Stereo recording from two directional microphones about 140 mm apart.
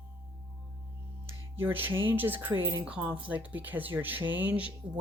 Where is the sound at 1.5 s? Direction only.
15° right (ahead or behind).